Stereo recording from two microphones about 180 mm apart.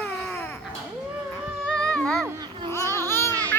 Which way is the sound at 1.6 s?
5° left (ahead or behind).